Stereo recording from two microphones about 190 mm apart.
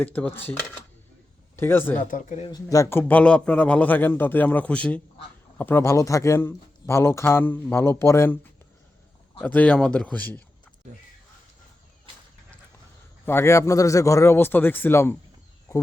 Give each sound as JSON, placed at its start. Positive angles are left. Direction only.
{"t": 0.0, "sound": "speech", "side_deg": 5}
{"t": 1.5, "sound": "speech", "side_deg": 10}
{"t": 2.0, "sound": "speech", "side_deg": 40}
{"t": 2.5, "sound": "speech", "side_deg": 20}
{"t": 9.4, "sound": "speech", "side_deg": 10}
{"t": 13.2, "sound": "speech", "side_deg": 15}